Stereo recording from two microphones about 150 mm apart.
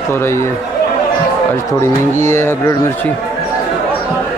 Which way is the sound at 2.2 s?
15° left (ahead or behind).